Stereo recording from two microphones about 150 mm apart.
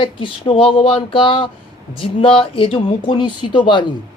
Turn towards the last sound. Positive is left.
turn(degrees=30)  # may be behind; listen again after turning